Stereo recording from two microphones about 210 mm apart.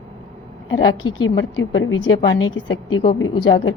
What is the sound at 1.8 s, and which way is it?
A woman's voice, 65° left (ahead or behind).